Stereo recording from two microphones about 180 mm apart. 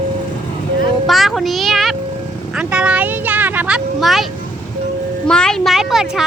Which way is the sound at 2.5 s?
5° right (ahead or behind).